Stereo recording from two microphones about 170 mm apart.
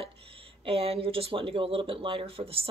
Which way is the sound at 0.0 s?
35° right (ahead or behind).